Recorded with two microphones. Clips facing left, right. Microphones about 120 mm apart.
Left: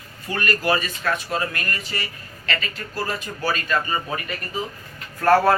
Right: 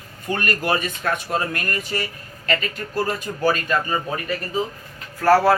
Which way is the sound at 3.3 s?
25° right (ahead or behind).